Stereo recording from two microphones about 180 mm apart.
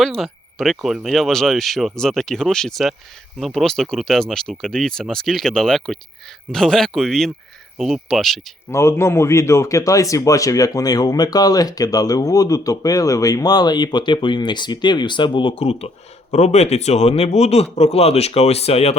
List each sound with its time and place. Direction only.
0.0 s speech: centre (ahead or behind)
8.7 s a man's voice: 15° left (ahead or behind); by 18.9 s 35° left (ahead or behind)